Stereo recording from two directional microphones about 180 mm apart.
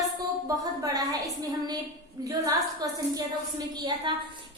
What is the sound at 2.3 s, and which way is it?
A woman's voice, 20° right (ahead or behind).